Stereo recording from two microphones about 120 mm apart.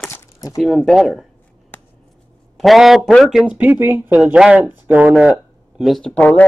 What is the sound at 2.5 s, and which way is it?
A man's voice, centre (ahead or behind).